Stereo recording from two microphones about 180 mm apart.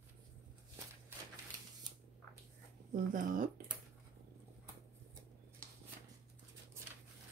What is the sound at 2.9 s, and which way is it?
Speech, 50° right (ahead or behind).